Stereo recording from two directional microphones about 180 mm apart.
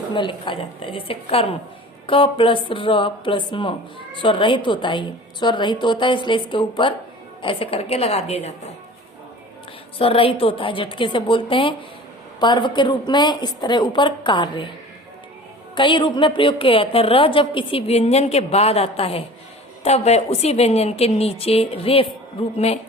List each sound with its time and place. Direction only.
0.1 s a woman's voice: 25° left (ahead or behind)
10.0 s speech: 30° left (ahead or behind)
15.7 s a woman's voice: 25° left (ahead or behind)